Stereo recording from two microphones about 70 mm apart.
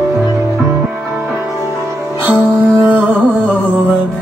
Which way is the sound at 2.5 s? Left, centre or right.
Right.